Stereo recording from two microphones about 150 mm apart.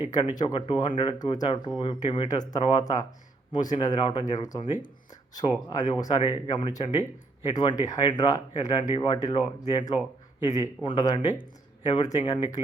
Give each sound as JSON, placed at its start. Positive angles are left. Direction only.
{"t": 0.1, "sound": "speech", "side_deg": 30}